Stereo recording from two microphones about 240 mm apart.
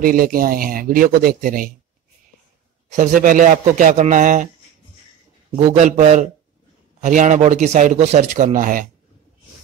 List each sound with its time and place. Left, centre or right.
0.0 s speech: right
3.0 s speech: right
5.6 s a man's voice: right